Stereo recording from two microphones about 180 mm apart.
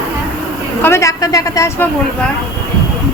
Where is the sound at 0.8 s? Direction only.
15° left (ahead or behind).